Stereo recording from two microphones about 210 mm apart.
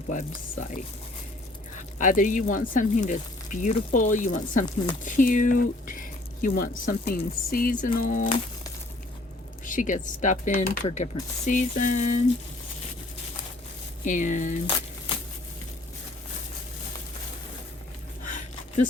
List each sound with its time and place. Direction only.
0.1 s speech: 35° left (ahead or behind)
9.6 s speech: 40° left (ahead or behind)
14.0 s speech: 35° left (ahead or behind)
18.3 s a sound: 35° left (ahead or behind)